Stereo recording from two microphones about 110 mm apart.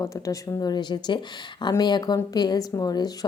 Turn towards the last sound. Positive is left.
turn(degrees=35)  # may be behind; listen again after turning